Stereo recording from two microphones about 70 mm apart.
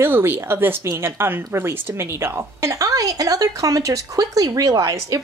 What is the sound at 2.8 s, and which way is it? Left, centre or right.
Speech, right.